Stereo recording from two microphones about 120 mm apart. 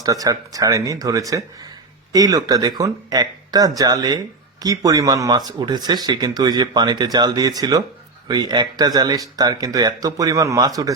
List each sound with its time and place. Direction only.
0.0 s speech: 30° right (ahead or behind)